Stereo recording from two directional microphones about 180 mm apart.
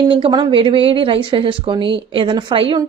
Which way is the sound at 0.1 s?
25° right (ahead or behind).